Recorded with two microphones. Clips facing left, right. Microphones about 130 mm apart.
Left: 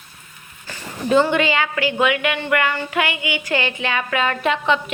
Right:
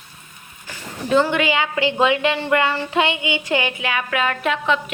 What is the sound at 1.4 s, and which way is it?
Speech, 20° right (ahead or behind).